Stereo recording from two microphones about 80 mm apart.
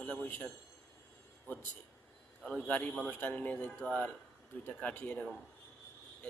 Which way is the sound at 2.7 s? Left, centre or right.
Centre.